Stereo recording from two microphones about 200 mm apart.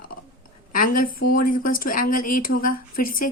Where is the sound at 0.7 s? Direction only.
45° left (ahead or behind).